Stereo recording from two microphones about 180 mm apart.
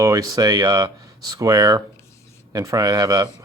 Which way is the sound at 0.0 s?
20° right (ahead or behind).